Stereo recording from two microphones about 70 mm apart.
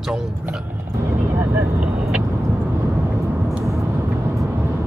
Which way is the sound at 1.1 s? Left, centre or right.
Right.